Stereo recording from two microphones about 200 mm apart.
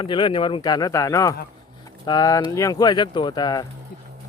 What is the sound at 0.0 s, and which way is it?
Speech, 25° left (ahead or behind).